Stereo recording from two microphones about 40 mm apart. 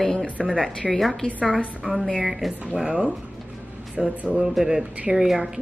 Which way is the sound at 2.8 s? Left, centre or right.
Right.